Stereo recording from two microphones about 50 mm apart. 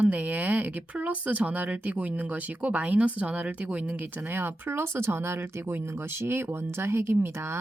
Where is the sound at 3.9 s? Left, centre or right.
Right.